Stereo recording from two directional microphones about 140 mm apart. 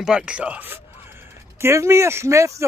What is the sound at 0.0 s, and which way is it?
Speech, 5° right (ahead or behind).